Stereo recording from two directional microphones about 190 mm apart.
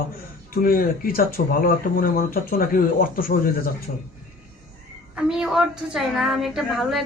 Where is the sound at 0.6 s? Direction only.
50° left (ahead or behind).